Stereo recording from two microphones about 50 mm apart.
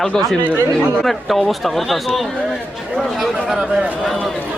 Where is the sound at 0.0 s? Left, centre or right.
Centre.